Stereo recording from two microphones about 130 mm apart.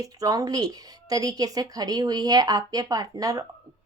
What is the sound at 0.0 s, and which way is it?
Speech, 30° right (ahead or behind).